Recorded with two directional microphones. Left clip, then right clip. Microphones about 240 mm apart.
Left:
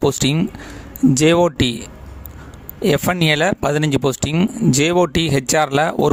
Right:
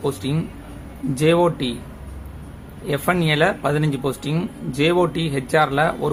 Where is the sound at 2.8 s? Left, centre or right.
Left.